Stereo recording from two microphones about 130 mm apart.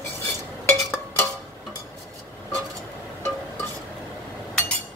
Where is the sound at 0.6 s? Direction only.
20° left (ahead or behind).